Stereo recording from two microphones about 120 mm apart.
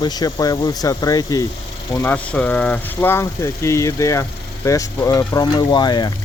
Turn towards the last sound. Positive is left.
turn(degrees=35)  # may be behind; listen again after turning